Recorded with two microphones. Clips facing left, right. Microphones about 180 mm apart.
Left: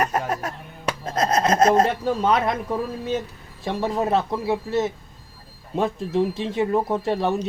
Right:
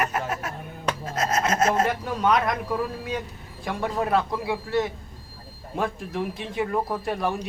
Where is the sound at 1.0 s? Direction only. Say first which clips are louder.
Left 5 dB; 35° left (ahead or behind).